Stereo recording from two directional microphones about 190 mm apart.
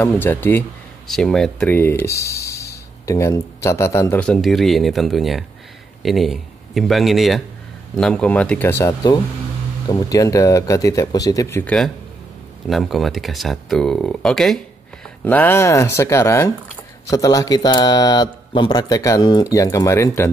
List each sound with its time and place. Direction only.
0.0 s speech: 10° left (ahead or behind)
12.6 s speech: centre (ahead or behind)